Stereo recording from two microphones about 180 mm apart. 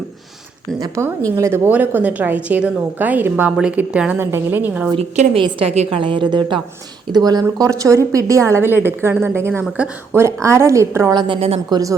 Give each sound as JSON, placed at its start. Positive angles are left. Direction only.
{"t": 0.8, "sound": "a woman's voice", "side_deg": -15}
{"t": 4.9, "sound": "a woman's voice", "side_deg": -35}
{"t": 11.3, "sound": "a woman's voice", "side_deg": -35}
{"t": 11.7, "sound": "a woman's voice", "side_deg": -20}